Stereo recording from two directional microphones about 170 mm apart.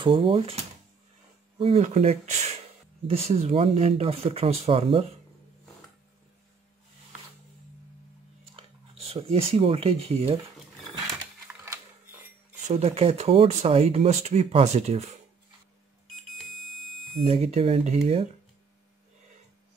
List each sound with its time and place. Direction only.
0.0 s speech: 30° right (ahead or behind)
1.6 s speech: 35° right (ahead or behind)
8.5 s speech: 35° right (ahead or behind)
12.6 s speech: 40° right (ahead or behind)
17.2 s speech: 40° right (ahead or behind)